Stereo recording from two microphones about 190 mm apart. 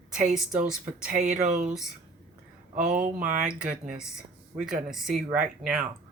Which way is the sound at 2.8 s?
45° right (ahead or behind).